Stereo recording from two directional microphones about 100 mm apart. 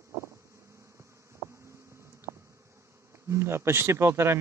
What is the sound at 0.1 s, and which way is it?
Bee, 25° right (ahead or behind).